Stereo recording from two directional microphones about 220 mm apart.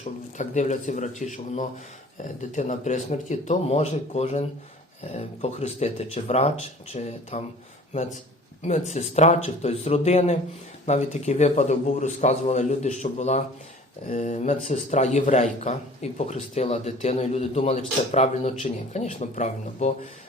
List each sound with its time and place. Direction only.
0.0 s speech: 35° left (ahead or behind)
8.6 s speech: 30° left (ahead or behind)